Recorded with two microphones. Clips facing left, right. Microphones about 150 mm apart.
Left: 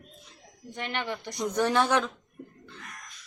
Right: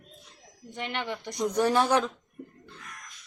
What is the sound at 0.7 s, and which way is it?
Speech, 15° right (ahead or behind).